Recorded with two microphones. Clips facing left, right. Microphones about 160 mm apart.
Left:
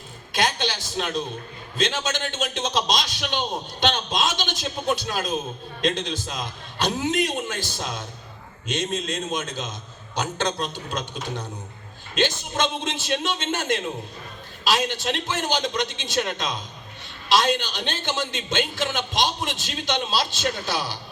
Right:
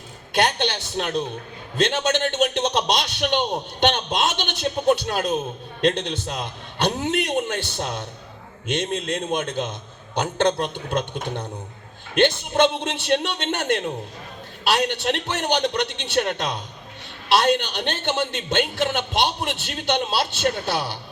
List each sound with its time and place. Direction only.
0.3 s a man's voice: 60° right (ahead or behind)